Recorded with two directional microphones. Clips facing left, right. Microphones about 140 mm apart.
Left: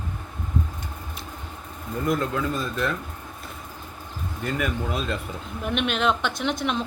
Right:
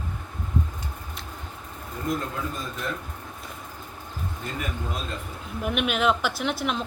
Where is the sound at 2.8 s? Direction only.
90° left.